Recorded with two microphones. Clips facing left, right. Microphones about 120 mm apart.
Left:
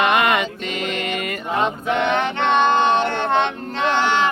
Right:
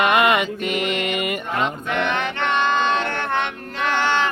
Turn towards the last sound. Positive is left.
turn(degrees=15)  # may be behind; listen again after turning